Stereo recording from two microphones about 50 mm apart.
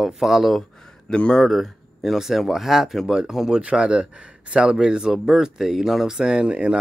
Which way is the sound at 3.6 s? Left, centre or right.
Right.